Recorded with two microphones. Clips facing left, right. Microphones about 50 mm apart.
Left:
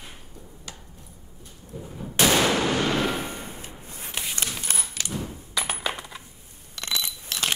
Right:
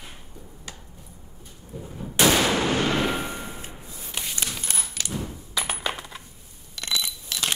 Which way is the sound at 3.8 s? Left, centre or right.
Left.